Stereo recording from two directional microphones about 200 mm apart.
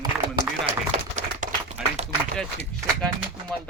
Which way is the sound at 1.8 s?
5° right (ahead or behind).